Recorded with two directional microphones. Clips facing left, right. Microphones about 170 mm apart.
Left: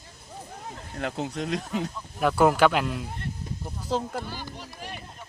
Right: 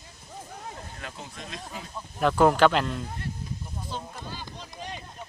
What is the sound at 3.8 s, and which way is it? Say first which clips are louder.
Speech: left 11 dB; 80° left.